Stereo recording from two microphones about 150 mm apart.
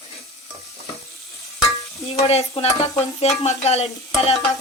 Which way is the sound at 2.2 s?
45° left (ahead or behind).